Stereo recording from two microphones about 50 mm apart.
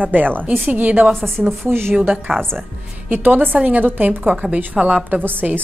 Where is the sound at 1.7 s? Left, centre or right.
Right.